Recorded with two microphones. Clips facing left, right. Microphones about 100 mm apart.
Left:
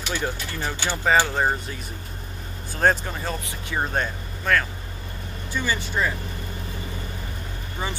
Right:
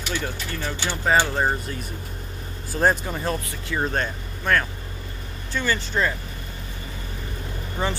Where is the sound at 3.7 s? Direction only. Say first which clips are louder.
Right 1 dB; 10° left (ahead or behind).